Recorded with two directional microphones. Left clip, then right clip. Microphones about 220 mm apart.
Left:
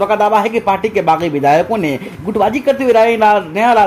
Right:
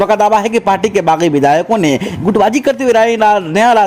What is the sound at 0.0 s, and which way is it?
A man's voice, 45° right (ahead or behind).